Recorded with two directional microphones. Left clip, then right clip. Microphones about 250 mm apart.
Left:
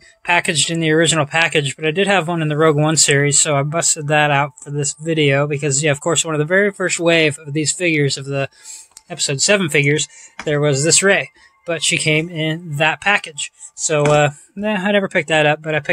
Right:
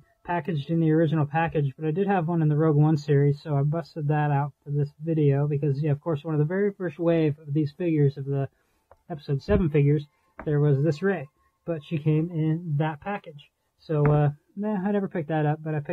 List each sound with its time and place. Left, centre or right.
0.3 s speech: centre
0.9 s speech: left
1.2 s speech: centre
13.8 s speech: centre